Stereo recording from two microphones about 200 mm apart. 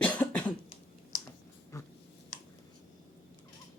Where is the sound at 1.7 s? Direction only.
15° left (ahead or behind).